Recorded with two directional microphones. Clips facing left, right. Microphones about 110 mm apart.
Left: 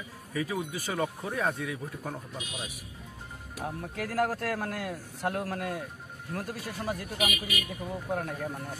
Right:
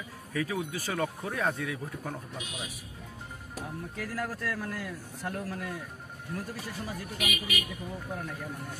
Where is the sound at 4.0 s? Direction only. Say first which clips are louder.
Left 6 dB; 60° left (ahead or behind).